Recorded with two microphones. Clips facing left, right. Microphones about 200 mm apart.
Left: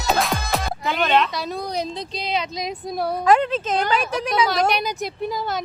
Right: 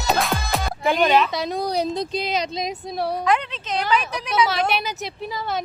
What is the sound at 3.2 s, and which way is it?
A woman's voice, 45° left (ahead or behind).